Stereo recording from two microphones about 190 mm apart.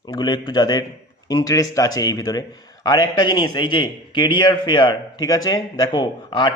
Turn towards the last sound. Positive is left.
turn(degrees=25)  # may be behind; listen again after turning